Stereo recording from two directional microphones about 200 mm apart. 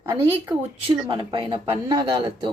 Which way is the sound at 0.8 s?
25° right (ahead or behind).